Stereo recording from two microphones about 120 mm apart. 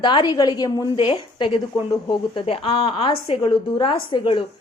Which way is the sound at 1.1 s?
45° left (ahead or behind).